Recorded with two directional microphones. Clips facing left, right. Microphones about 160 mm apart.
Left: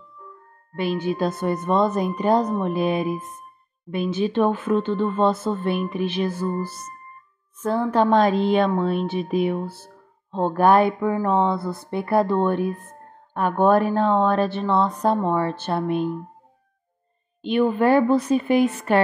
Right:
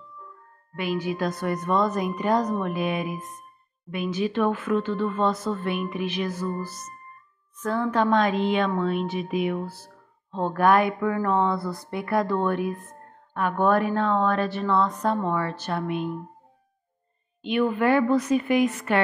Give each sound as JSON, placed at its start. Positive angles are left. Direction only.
{"t": 0.7, "sound": "a woman's voice", "side_deg": 30}
{"t": 17.4, "sound": "a woman's voice", "side_deg": 30}